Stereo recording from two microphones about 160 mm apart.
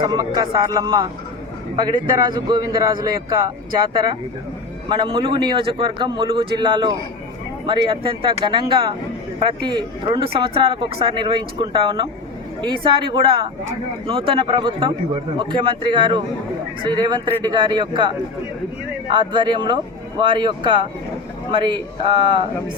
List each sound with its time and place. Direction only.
0.0 s speech: 25° right (ahead or behind)
2.3 s speech: 25° right (ahead or behind)
4.9 s a man's voice: 30° right (ahead or behind)
19.1 s a man's voice: 30° right (ahead or behind)